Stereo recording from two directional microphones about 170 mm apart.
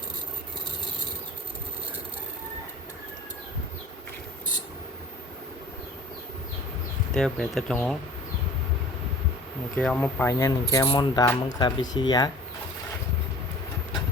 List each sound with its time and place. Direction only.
7.1 s speech: 5° left (ahead or behind)
9.7 s speech: 5° left (ahead or behind); by 12.3 s 25° left (ahead or behind)